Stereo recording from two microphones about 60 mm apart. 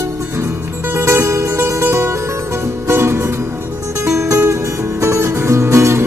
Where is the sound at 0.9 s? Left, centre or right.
Right.